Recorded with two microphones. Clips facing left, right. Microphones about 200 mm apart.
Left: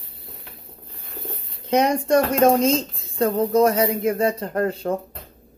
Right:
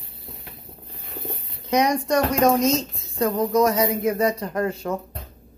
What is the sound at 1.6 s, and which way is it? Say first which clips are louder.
A woman's voice: left 2 dB; 30° left (ahead or behind).